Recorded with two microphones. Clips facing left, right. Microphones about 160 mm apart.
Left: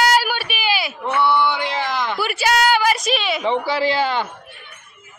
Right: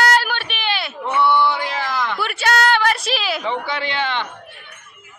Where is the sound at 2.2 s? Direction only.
5° left (ahead or behind).